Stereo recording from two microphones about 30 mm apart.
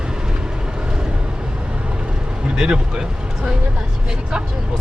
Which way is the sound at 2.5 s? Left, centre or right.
Right.